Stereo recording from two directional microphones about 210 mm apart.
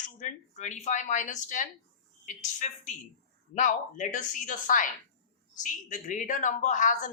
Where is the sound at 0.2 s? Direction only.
35° left (ahead or behind).